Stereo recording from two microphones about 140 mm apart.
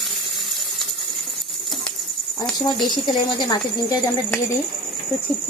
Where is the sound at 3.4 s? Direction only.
30° left (ahead or behind).